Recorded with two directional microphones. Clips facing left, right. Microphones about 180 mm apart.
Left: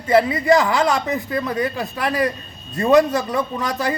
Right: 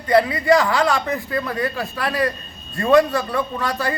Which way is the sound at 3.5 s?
20° left (ahead or behind).